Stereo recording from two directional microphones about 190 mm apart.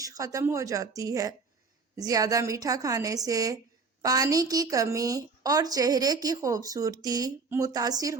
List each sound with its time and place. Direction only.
0.0 s a woman's voice: 15° right (ahead or behind)